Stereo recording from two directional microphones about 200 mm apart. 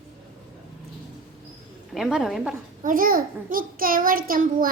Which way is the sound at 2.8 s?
45° right (ahead or behind).